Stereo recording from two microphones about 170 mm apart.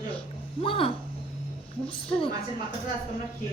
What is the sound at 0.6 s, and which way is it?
Speech, 30° left (ahead or behind).